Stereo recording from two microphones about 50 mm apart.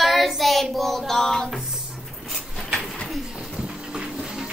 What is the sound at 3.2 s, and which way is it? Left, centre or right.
Music, centre.